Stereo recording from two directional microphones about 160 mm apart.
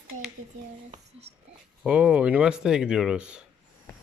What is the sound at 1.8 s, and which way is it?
Speech, 5° right (ahead or behind).